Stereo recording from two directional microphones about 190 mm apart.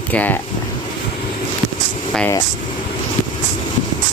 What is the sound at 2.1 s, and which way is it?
Vehicle, 5° left (ahead or behind).